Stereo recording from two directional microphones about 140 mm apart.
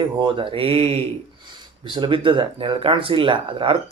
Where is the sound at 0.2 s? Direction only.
40° right (ahead or behind).